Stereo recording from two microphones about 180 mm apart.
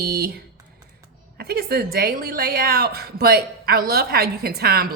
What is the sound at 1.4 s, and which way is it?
A woman's voice, 60° right (ahead or behind).